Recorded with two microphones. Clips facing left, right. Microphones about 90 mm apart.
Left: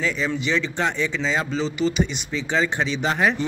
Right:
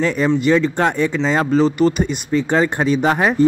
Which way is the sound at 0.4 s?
50° right (ahead or behind).